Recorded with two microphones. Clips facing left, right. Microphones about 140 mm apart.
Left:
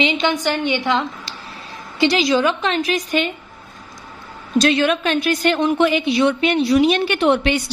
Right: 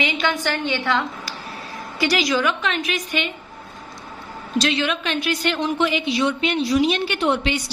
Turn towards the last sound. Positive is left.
turn(degrees=55)  # may be behind; listen again after turning